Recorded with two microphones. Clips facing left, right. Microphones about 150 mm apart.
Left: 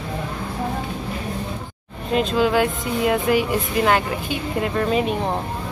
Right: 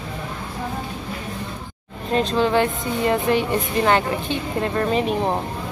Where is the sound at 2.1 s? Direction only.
5° left (ahead or behind).